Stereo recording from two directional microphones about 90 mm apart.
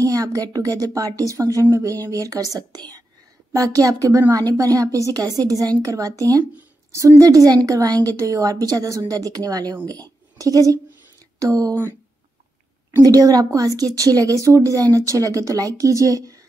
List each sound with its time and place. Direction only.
0.0 s a woman's voice: 40° right (ahead or behind)
10.3 s a sound: 40° right (ahead or behind)
11.3 s speech: 40° right (ahead or behind)
13.0 s a woman's voice: 45° right (ahead or behind)